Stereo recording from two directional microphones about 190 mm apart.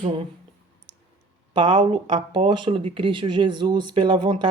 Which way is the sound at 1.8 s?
25° right (ahead or behind).